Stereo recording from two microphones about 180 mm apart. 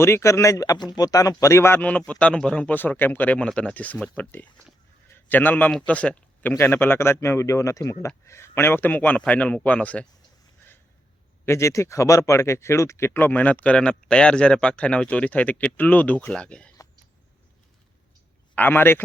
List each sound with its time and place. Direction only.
0.0 s speech: 15° left (ahead or behind)
11.4 s speech: 15° left (ahead or behind)
18.5 s speech: 10° left (ahead or behind)